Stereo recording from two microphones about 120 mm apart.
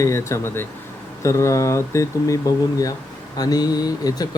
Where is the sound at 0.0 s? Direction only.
25° left (ahead or behind).